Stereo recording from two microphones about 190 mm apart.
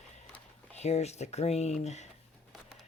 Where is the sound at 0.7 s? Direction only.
35° left (ahead or behind).